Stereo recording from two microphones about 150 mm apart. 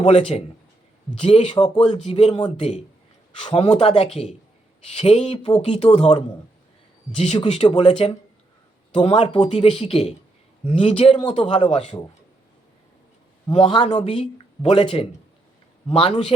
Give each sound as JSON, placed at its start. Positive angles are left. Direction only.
{"t": 0.0, "sound": "speech", "side_deg": 40}
{"t": 7.4, "sound": "speech", "side_deg": 45}
{"t": 11.4, "sound": "speech", "side_deg": 35}
{"t": 13.5, "sound": "speech", "side_deg": 35}
{"t": 13.9, "sound": "speech", "side_deg": 45}